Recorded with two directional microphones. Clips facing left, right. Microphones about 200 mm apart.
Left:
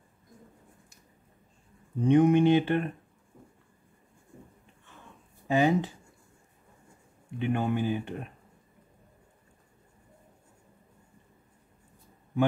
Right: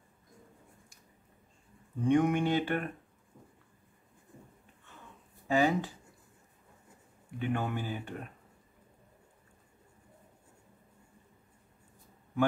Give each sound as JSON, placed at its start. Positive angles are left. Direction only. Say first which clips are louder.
{"t": 2.0, "sound": "speech", "louder": "left 6 dB", "side_deg": 20}
{"t": 5.5, "sound": "speech", "louder": "left 3 dB", "side_deg": 20}
{"t": 7.3, "sound": "speech", "louder": "left 5 dB", "side_deg": 20}